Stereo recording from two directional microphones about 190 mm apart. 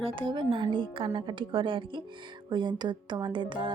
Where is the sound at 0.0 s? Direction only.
25° right (ahead or behind).